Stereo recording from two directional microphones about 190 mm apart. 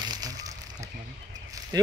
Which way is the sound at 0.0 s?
20° right (ahead or behind).